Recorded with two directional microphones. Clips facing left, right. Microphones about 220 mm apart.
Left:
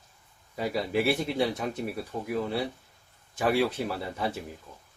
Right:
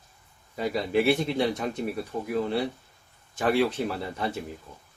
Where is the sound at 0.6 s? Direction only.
5° left (ahead or behind).